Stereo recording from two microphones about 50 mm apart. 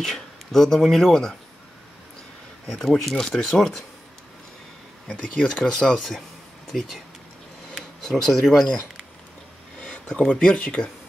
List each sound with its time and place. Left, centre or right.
0.0 s speech: centre
2.6 s speech: centre
5.1 s speech: left; by 8.7 s centre
9.8 s speech: centre